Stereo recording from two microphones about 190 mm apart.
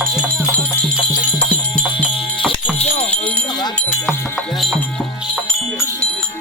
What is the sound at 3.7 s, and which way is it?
Music, centre (ahead or behind).